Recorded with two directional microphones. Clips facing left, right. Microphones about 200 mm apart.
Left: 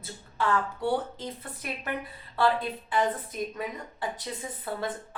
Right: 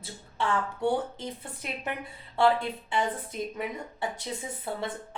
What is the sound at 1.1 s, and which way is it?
Speech, 25° right (ahead or behind).